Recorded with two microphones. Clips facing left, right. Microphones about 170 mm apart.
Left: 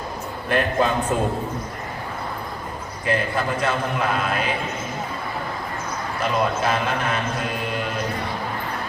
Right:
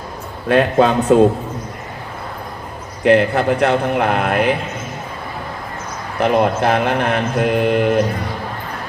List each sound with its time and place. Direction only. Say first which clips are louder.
0.4 s a man's voice: right 8 dB; 90° right
3.0 s mantra: right 10 dB; 70° right (ahead or behind)
6.1 s mantra: right 8 dB; 60° right (ahead or behind)